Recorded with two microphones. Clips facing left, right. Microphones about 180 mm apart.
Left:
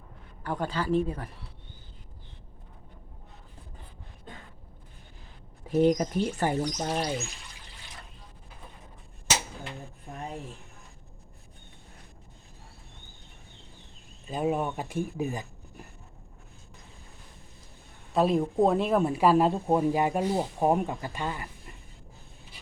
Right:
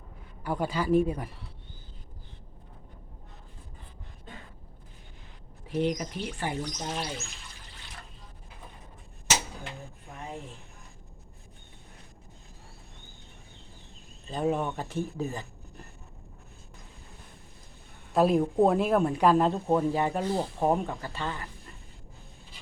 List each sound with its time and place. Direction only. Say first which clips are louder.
0.4 s speech: right 1 dB; 10° right (ahead or behind)
5.6 s speech: left 6 dB; 45° left (ahead or behind)
14.3 s speech: even; 10° left (ahead or behind)
18.1 s speech: right 1 dB; centre (ahead or behind)